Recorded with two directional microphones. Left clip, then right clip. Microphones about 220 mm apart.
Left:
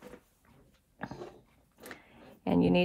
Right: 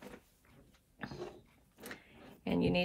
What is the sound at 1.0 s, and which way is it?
Dog, 40° left (ahead or behind).